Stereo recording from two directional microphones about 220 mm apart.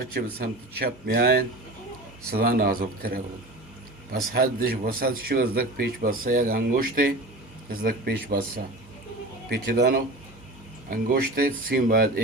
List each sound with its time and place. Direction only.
0.1 s speech: 45° right (ahead or behind)
4.3 s speech: 45° right (ahead or behind)